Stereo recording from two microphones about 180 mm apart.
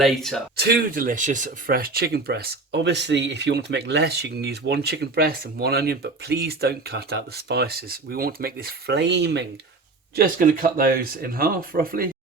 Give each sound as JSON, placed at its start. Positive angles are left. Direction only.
{"t": 0.0, "sound": "speech", "side_deg": 0}
{"t": 0.6, "sound": "speech", "side_deg": -60}
{"t": 10.2, "sound": "speech", "side_deg": -50}